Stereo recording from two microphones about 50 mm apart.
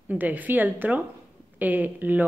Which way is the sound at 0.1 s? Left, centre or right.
Right.